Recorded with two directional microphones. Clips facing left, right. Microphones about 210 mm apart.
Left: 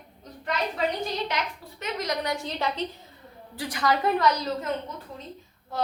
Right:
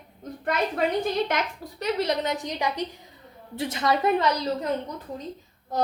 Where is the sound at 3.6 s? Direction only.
25° right (ahead or behind).